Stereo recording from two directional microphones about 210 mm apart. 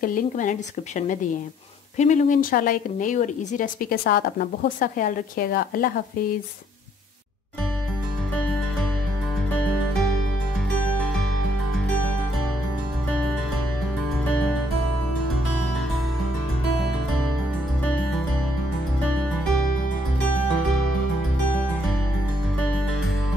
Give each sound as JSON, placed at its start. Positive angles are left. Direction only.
{"t": 0.0, "sound": "speech", "side_deg": 40}
{"t": 14.2, "sound": "music", "side_deg": 5}